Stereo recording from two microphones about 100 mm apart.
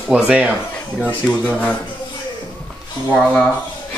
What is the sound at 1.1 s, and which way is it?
Speech, 15° left (ahead or behind).